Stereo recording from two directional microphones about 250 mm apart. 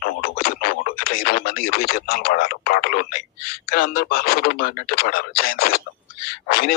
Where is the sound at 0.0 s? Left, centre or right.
Left.